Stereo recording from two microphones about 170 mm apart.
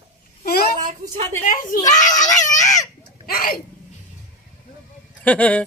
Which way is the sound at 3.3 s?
60° left (ahead or behind).